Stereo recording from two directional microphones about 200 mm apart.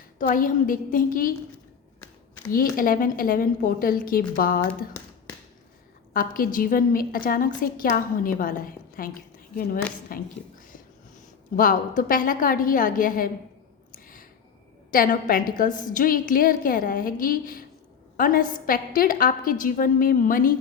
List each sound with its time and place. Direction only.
0.2 s a woman's voice: 40° left (ahead or behind)
2.7 s a woman's voice: 45° left (ahead or behind)
6.1 s a woman's voice: 45° left (ahead or behind)
10.1 s a woman's voice: 45° left (ahead or behind)
11.5 s a woman's voice: 45° left (ahead or behind)
13.9 s a sound: 45° left (ahead or behind)
14.8 s a woman's voice: 45° left (ahead or behind)